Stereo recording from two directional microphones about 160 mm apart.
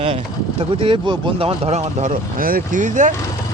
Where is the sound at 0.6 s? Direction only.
35° right (ahead or behind); by 3.1 s 50° right (ahead or behind).